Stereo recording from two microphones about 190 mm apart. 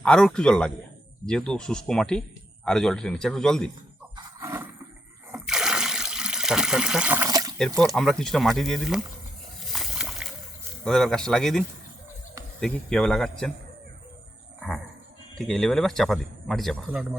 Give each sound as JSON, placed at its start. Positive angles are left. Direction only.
{"t": 0.0, "sound": "speech", "side_deg": 5}
{"t": 4.1, "sound": "horse", "side_deg": -15}
{"t": 5.3, "sound": "water", "side_deg": -5}
{"t": 7.3, "sound": "water", "side_deg": -20}
{"t": 7.9, "sound": "speech", "side_deg": 0}
{"t": 9.6, "sound": "splash", "side_deg": 0}
{"t": 10.8, "sound": "speech", "side_deg": 5}
{"t": 15.4, "sound": "speech", "side_deg": 0}